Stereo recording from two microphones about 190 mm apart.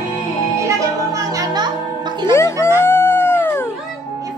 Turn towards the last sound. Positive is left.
turn(degrees=10)  # may be behind; listen again after turning